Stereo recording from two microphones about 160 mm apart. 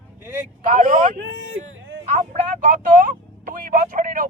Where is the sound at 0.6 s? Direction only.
55° right (ahead or behind).